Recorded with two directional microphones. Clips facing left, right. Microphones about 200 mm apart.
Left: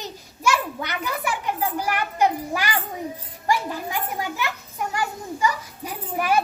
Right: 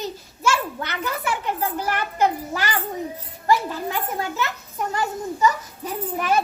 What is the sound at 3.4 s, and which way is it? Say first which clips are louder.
Children playing: right 3 dB; 15° left (ahead or behind).